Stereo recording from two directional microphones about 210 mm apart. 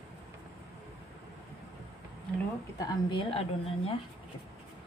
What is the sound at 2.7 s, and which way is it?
Speech, 25° left (ahead or behind).